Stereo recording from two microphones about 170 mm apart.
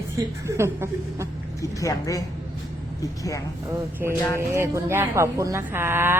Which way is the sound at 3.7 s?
15° right (ahead or behind).